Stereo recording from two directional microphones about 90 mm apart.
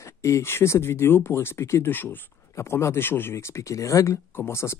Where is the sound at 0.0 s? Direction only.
35° left (ahead or behind).